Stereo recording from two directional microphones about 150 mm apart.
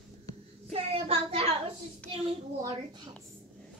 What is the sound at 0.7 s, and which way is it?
Child singing, 40° right (ahead or behind).